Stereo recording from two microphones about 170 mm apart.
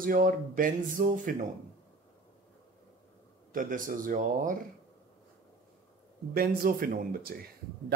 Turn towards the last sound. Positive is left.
turn(degrees=-55)  # may be behind; listen again after turning